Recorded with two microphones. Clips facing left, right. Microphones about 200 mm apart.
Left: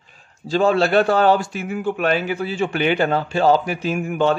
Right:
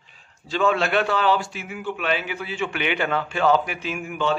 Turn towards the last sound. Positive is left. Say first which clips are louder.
# left 6 dB
turn(degrees=45)  # may be behind; listen again after turning